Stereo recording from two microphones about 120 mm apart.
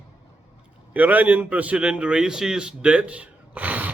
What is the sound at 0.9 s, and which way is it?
A man's voice, 15° right (ahead or behind).